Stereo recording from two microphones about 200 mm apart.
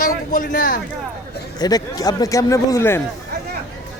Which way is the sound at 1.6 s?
20° left (ahead or behind).